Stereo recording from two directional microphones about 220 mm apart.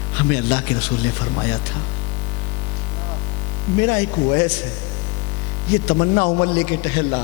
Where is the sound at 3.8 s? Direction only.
15° left (ahead or behind).